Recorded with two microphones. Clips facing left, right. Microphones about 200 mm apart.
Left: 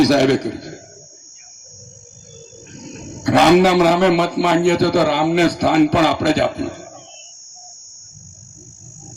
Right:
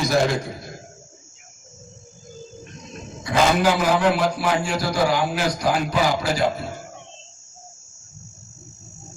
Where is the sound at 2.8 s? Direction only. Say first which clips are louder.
Left 12 dB; 75° left (ahead or behind).